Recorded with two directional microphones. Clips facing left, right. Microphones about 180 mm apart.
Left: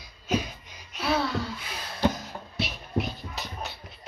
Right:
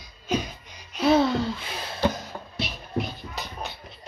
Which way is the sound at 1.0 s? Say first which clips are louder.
Right 7 dB; 20° right (ahead or behind).